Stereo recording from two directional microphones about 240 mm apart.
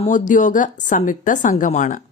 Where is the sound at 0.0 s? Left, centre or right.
Left.